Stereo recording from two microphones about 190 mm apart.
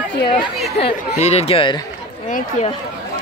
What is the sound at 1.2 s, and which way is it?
Speech, 35° left (ahead or behind).